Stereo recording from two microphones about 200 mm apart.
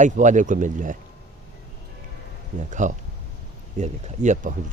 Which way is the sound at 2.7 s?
40° right (ahead or behind).